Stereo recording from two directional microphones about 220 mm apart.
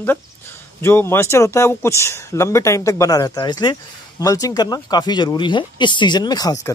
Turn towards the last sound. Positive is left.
turn(degrees=20)  # may be behind; listen again after turning